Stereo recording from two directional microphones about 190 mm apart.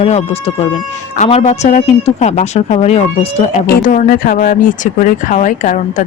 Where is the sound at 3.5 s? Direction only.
45° left (ahead or behind).